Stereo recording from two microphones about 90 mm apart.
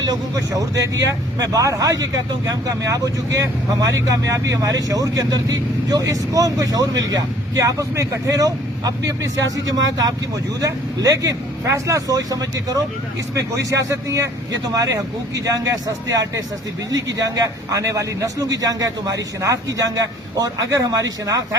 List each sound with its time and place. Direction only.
0.0 s speech: 45° right (ahead or behind)